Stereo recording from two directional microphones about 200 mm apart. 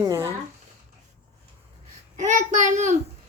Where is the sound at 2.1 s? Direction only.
35° right (ahead or behind).